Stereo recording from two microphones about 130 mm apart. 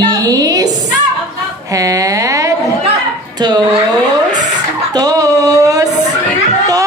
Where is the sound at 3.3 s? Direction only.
30° right (ahead or behind).